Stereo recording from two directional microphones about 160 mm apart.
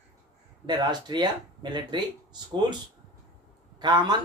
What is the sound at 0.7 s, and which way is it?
Speech, 25° right (ahead or behind).